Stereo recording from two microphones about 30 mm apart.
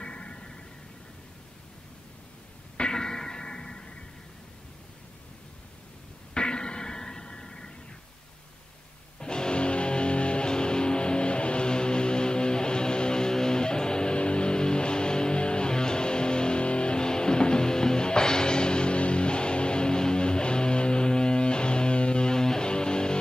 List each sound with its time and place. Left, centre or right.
0.0 s a sound: left
2.8 s music: left
6.3 s music: left
9.2 s music: left